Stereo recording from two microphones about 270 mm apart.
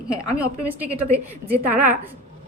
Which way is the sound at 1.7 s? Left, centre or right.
Right.